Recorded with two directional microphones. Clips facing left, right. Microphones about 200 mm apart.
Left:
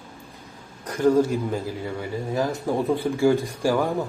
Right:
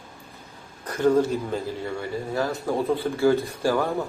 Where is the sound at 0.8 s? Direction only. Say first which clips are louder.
Left 1 dB; 10° left (ahead or behind).